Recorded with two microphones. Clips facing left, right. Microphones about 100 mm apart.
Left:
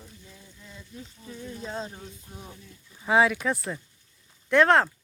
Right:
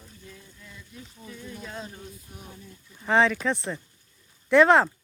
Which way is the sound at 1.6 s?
30° left (ahead or behind).